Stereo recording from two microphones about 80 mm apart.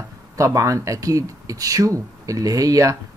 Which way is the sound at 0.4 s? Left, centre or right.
Right.